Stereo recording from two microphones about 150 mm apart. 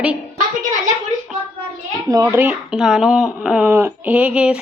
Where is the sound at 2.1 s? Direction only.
20° right (ahead or behind).